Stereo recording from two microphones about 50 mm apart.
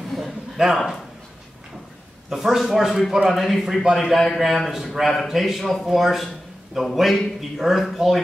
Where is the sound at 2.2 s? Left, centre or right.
Centre.